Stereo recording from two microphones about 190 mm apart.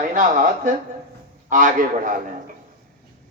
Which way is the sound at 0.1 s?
40° right (ahead or behind).